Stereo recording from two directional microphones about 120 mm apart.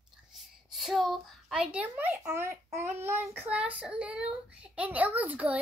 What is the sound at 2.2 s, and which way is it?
A child's voice, 25° right (ahead or behind).